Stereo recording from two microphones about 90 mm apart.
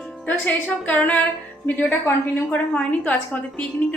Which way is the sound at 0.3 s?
15° left (ahead or behind).